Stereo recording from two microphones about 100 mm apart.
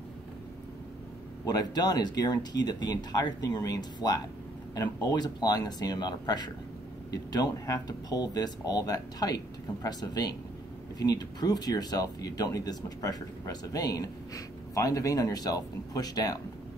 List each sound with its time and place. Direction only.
1.4 s speech: 40° left (ahead or behind)